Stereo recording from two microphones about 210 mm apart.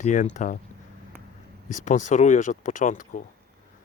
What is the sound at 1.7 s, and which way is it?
Speech, 35° left (ahead or behind).